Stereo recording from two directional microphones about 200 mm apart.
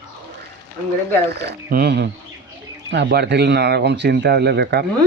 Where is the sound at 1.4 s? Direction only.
55° right (ahead or behind).